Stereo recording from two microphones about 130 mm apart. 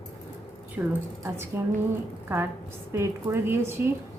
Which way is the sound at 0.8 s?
20° right (ahead or behind).